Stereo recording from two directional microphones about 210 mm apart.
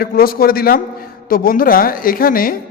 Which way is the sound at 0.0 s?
45° left (ahead or behind).